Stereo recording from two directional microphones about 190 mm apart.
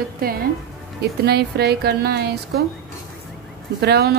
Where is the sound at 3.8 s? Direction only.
55° right (ahead or behind).